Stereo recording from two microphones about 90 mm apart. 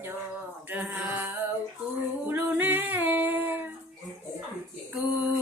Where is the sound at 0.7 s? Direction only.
20° right (ahead or behind).